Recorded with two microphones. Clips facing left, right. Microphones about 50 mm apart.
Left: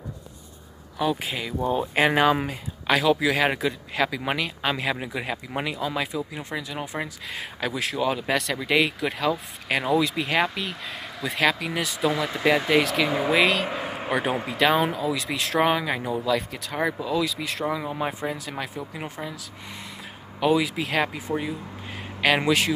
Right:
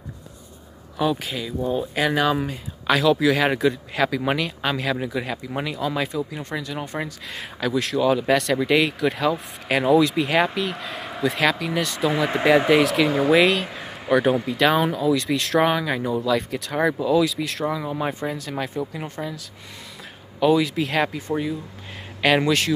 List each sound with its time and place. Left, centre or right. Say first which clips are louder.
1.2 s speech: right 1 dB; left
2.4 s speech: right 3 dB; centre
12.1 s speech: right 4 dB; right
12.6 s speech: right 4 dB; centre
13.8 s a sound: right 5 dB; left
14.6 s speech: even; centre